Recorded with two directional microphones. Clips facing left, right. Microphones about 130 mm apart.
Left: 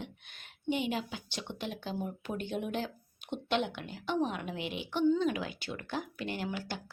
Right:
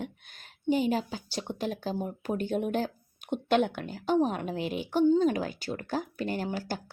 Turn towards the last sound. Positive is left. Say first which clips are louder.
# right 5 dB
turn(degrees=-40)  # may be behind; listen again after turning